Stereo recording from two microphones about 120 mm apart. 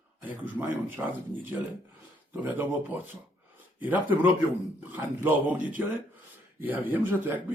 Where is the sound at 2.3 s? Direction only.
15° right (ahead or behind).